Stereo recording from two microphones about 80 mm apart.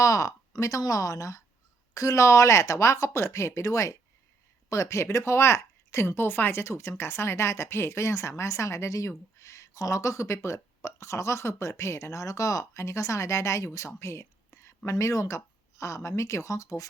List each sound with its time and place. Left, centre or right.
0.0 s a woman's voice: left